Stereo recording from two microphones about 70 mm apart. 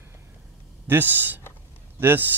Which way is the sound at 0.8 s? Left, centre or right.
Right.